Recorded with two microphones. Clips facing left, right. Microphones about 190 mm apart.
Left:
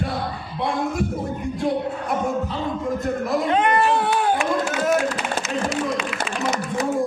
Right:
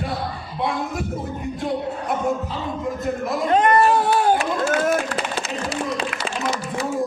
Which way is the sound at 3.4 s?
40° right (ahead or behind).